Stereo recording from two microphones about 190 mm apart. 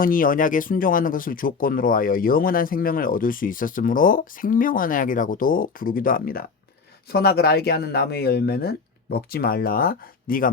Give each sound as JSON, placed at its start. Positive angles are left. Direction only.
{"t": 0.0, "sound": "speech", "side_deg": 45}